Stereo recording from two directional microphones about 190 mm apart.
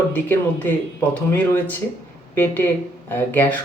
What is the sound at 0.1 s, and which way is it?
Speech, 10° left (ahead or behind).